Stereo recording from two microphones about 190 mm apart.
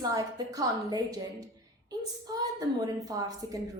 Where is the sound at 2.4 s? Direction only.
20° right (ahead or behind).